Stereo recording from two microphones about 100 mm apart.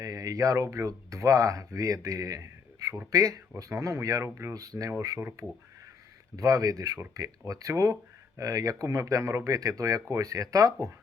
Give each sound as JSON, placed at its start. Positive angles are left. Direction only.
{"t": 0.0, "sound": "speech", "side_deg": -35}